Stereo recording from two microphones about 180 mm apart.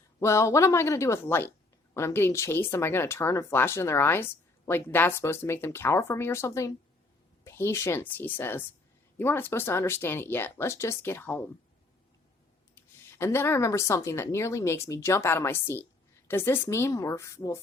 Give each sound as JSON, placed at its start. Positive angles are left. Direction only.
{"t": 0.2, "sound": "speech", "side_deg": 15}
{"t": 12.7, "sound": "speech", "side_deg": 15}